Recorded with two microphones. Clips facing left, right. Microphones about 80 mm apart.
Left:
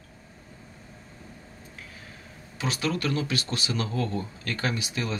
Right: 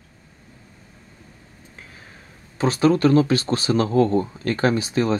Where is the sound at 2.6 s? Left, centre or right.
Right.